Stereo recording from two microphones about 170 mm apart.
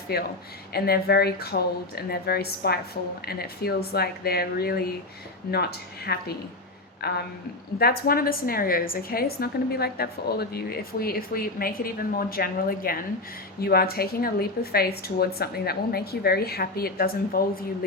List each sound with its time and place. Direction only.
0.1 s a woman's voice: 70° left (ahead or behind)
6.1 s a woman's voice: 75° left (ahead or behind)